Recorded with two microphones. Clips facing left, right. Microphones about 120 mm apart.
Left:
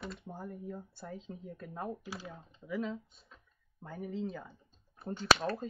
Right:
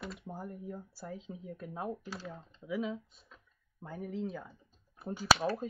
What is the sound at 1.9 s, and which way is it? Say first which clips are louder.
Speech: right 1 dB; 15° left (ahead or behind).